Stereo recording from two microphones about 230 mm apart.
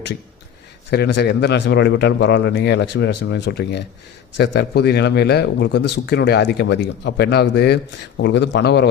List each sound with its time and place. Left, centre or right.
0.9 s speech: left